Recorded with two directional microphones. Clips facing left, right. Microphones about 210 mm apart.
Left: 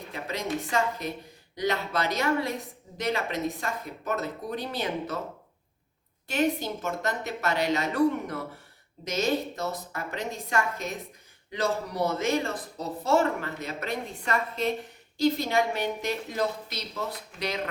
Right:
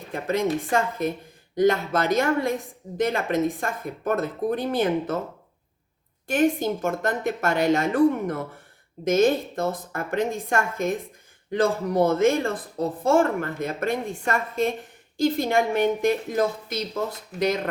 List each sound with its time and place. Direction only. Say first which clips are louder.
0.1 s speech: right 8 dB; 50° right (ahead or behind)
6.2 s speech: right 5 dB; 50° right (ahead or behind)